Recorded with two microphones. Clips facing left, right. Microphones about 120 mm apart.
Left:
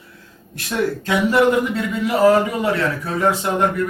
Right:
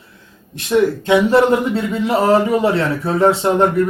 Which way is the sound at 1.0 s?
30° right (ahead or behind).